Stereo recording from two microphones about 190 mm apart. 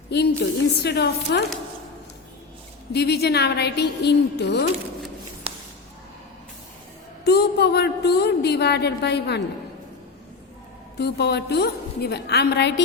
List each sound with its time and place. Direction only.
0.1 s a woman's voice: 60° left (ahead or behind)
2.9 s a woman's voice: 60° left (ahead or behind)
7.3 s a woman's voice: 60° left (ahead or behind)
10.9 s a woman's voice: 60° left (ahead or behind)